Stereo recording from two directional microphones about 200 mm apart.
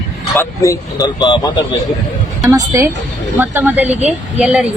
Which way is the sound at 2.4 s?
15° right (ahead or behind).